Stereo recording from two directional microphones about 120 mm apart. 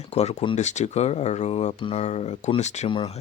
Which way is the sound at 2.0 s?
70° left (ahead or behind).